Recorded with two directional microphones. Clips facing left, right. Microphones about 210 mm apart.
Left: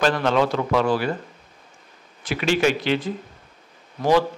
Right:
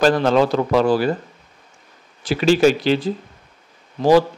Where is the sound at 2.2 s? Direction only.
35° right (ahead or behind).